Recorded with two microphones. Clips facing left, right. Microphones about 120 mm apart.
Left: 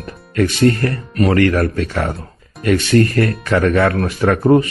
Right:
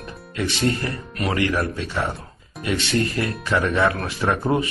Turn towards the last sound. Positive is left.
turn(degrees=45)  # may be behind; listen again after turning